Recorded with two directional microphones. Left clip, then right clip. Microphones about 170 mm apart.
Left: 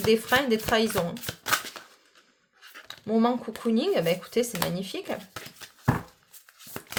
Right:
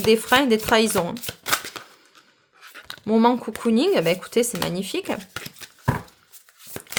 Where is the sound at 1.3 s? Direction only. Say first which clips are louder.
Right 3 dB; 20° right (ahead or behind).